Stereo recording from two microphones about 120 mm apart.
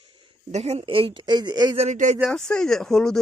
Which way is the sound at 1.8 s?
80° right.